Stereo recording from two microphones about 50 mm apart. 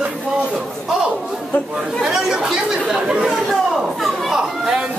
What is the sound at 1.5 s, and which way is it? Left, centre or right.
Speech, left.